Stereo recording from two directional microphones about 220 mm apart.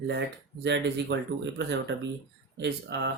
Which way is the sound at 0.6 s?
55° right (ahead or behind).